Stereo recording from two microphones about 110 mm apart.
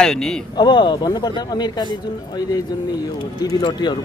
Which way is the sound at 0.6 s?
40° left (ahead or behind).